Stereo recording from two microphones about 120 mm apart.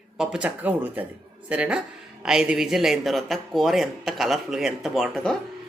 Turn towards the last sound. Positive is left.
turn(degrees=0)  # may be behind; listen again after turning